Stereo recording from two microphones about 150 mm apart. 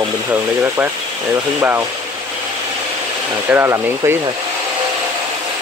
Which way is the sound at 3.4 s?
15° right (ahead or behind).